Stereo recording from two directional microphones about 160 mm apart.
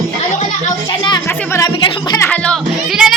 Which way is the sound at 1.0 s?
25° left (ahead or behind).